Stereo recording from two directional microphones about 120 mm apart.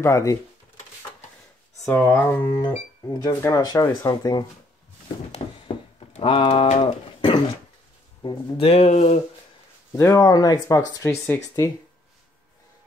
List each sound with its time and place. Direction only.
0.0 s speech: 25° left (ahead or behind)
1.9 s speech: 20° left (ahead or behind); by 4.5 s 35° left (ahead or behind)
5.4 s a sound: 55° left (ahead or behind)
5.9 s speech: 50° left (ahead or behind)
6.8 s a sound: 45° left (ahead or behind)
8.2 s speech: 40° left (ahead or behind)
8.6 s speech: 60° left (ahead or behind)
9.9 s speech: 25° left (ahead or behind)
11.1 s speech: 20° left (ahead or behind)